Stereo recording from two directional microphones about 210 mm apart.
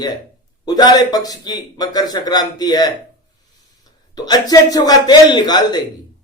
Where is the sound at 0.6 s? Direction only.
20° left (ahead or behind).